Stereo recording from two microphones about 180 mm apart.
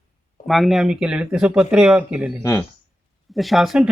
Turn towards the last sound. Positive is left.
turn(degrees=0)  # may be behind; listen again after turning